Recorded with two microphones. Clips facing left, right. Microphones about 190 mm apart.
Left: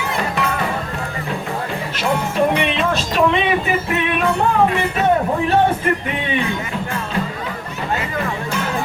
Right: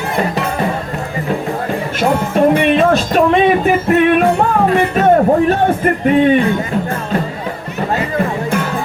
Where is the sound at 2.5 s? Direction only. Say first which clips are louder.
Right 8 dB; 50° right (ahead or behind).